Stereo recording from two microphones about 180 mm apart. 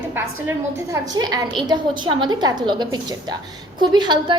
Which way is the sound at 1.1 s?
20° right (ahead or behind).